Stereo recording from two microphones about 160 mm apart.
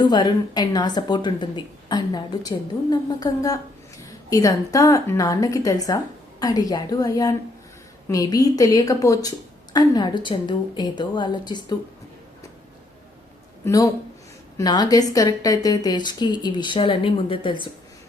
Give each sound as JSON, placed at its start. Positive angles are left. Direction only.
{"t": 0.0, "sound": "a woman's voice", "side_deg": 30}
{"t": 13.7, "sound": "a woman's voice", "side_deg": 20}